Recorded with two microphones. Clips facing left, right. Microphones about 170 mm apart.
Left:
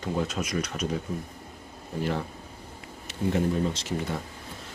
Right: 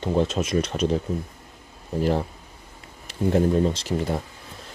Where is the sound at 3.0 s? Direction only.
35° right (ahead or behind).